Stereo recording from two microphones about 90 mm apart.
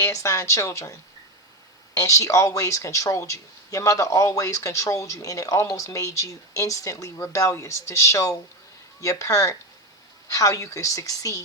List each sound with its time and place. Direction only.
0.0 s speech: 35° left (ahead or behind)